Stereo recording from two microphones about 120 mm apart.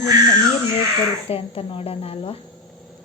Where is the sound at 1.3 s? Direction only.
50° left (ahead or behind).